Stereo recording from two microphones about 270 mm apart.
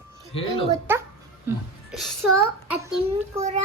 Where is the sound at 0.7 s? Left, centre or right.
Centre.